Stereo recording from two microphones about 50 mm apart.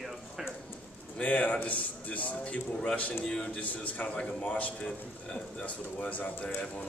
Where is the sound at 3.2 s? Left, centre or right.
Centre.